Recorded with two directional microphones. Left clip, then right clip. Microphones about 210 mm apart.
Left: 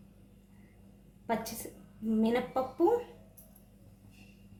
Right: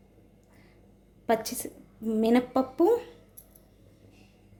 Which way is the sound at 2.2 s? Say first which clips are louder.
Right 6 dB; 55° right (ahead or behind).